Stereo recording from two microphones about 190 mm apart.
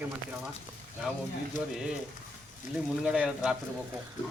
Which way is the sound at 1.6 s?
45° left (ahead or behind).